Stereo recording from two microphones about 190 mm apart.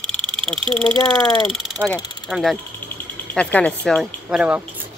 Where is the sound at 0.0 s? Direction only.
5° left (ahead or behind).